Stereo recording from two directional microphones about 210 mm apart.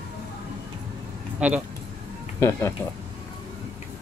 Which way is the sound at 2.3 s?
15° left (ahead or behind).